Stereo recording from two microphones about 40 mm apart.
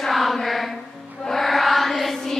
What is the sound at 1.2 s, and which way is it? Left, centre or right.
Chant, centre.